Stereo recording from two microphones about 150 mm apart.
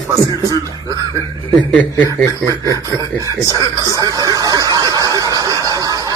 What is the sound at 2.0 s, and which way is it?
Speech, 20° right (ahead or behind).